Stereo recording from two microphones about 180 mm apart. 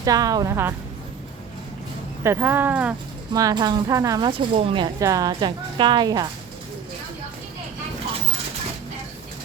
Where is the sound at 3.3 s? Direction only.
20° right (ahead or behind).